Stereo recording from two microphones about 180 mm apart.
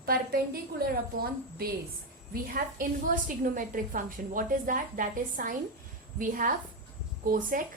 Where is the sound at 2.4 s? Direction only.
55° right (ahead or behind).